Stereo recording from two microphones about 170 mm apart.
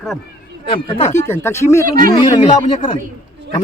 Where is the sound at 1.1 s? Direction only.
15° left (ahead or behind).